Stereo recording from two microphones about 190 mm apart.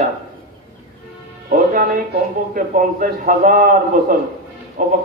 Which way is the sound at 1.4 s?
45° right (ahead or behind).